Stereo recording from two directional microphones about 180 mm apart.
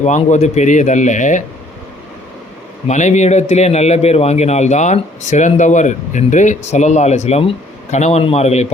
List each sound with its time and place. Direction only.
0.0 s speech: 40° left (ahead or behind)
2.8 s speech: 40° left (ahead or behind)